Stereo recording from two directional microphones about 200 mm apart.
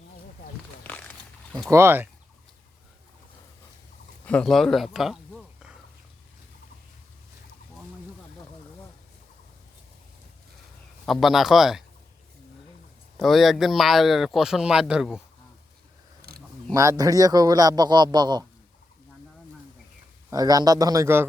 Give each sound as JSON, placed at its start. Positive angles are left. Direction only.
{"t": 0.9, "sound": "a sound", "side_deg": 5}
{"t": 1.7, "sound": "speech", "side_deg": -10}
{"t": 4.3, "sound": "speech", "side_deg": 5}
{"t": 11.0, "sound": "speech", "side_deg": 0}
{"t": 13.1, "sound": "speech", "side_deg": 0}
{"t": 16.2, "sound": "a sound", "side_deg": -50}
{"t": 16.7, "sound": "a man's voice", "side_deg": -15}
{"t": 20.3, "sound": "a man's voice", "side_deg": -20}